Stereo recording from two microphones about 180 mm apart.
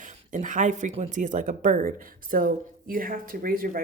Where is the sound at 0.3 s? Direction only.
45° right (ahead or behind).